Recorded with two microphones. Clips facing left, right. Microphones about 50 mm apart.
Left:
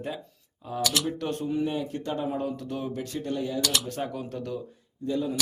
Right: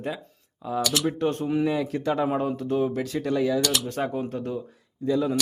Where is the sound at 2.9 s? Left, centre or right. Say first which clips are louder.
Right 5 dB; right.